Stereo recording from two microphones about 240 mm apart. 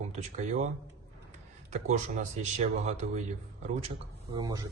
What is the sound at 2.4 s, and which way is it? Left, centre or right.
Speech, right.